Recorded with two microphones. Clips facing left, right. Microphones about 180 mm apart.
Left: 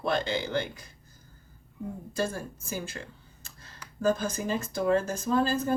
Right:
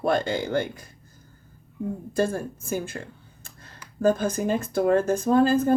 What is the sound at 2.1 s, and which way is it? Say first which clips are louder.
Speech: right 6 dB; 55° right (ahead or behind).